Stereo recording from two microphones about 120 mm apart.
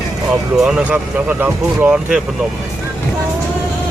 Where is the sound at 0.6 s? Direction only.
5° right (ahead or behind).